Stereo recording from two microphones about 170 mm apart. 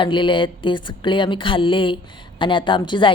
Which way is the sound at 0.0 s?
30° left (ahead or behind).